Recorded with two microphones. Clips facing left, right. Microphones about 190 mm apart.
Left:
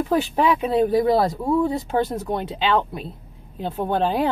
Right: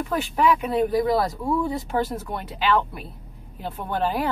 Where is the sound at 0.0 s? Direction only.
30° left (ahead or behind).